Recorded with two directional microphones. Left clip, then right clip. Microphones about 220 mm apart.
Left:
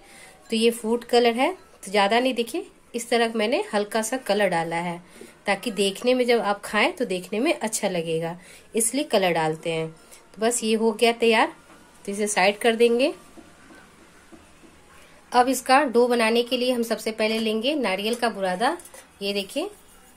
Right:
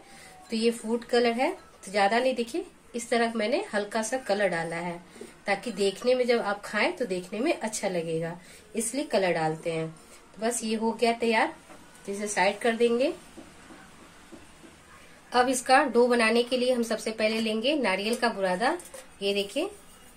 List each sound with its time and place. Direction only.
0.5 s a woman's voice: 40° left (ahead or behind)
15.2 s a woman's voice: 30° left (ahead or behind)